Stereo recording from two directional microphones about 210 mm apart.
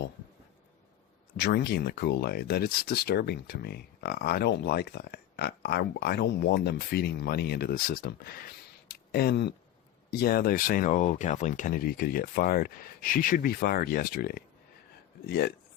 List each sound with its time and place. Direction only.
1.4 s speech: 55° left (ahead or behind)
8.9 s a sound: 50° left (ahead or behind)
10.1 s speech: 45° left (ahead or behind)